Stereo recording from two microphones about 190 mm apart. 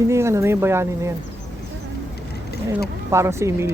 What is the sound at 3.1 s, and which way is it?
Speech, 15° right (ahead or behind).